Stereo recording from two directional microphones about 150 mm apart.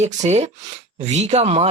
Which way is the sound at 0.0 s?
50° right (ahead or behind).